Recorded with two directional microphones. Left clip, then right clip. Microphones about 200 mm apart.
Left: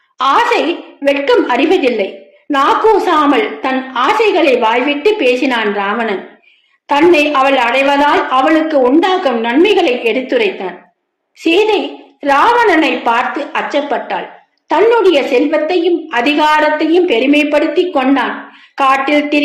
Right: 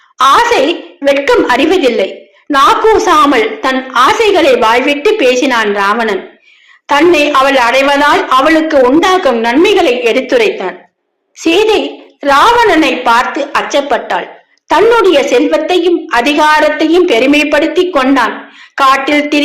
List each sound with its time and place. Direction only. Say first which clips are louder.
0.2 s a woman's voice: right 4 dB; centre (ahead or behind)